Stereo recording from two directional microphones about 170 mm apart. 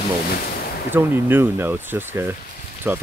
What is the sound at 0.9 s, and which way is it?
Speech, 10° right (ahead or behind).